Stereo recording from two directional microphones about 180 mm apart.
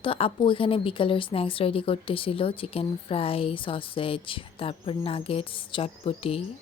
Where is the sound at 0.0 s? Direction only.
30° left (ahead or behind).